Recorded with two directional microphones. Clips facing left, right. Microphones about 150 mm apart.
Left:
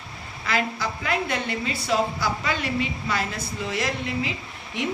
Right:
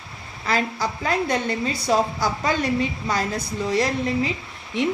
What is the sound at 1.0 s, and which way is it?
Speech, 35° right (ahead or behind).